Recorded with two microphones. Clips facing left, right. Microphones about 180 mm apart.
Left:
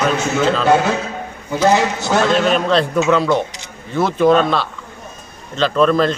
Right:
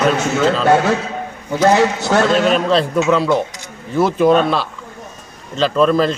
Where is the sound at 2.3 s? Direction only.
Centre (ahead or behind).